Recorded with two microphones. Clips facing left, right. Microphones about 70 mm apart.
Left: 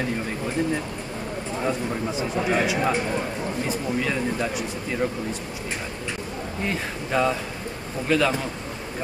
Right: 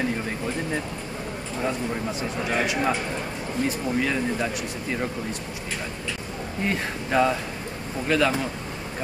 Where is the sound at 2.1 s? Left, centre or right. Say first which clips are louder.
Left 5 dB; centre.